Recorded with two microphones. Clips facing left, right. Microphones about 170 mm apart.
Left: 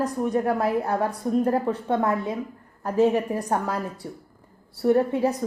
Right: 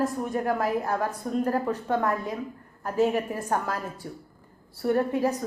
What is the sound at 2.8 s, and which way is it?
A woman's voice, 35° left (ahead or behind).